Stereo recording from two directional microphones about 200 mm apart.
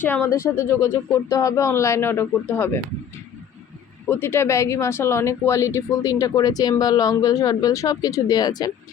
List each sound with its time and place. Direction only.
0.0 s speech: 10° left (ahead or behind)
4.1 s speech: 10° left (ahead or behind)